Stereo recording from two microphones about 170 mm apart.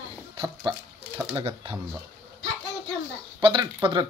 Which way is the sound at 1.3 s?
30° right (ahead or behind).